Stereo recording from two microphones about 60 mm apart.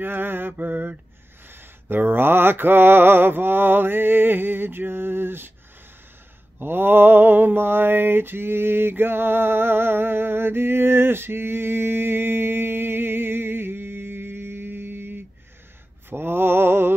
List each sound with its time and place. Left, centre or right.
0.0 s mantra: right
6.6 s mantra: right